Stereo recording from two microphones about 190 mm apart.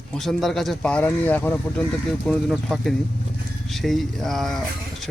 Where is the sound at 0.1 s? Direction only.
Centre (ahead or behind).